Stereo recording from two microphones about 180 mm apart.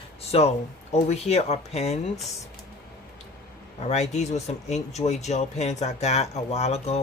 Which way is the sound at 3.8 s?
40° left (ahead or behind).